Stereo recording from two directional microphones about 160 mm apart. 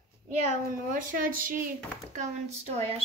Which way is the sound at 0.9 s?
55° right (ahead or behind).